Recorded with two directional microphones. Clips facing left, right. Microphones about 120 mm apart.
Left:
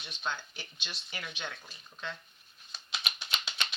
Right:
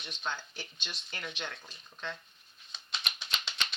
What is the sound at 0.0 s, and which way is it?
Speech, 5° left (ahead or behind).